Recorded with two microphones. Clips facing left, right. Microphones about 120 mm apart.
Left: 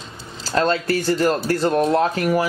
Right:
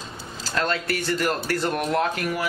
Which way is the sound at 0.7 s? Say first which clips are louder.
Left 6 dB; 30° left (ahead or behind).